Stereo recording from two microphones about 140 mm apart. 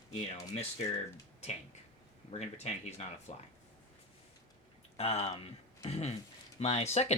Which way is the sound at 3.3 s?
50° left (ahead or behind).